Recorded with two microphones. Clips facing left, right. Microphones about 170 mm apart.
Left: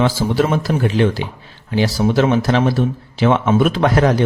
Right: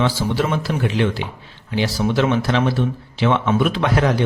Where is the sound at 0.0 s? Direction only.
45° left (ahead or behind).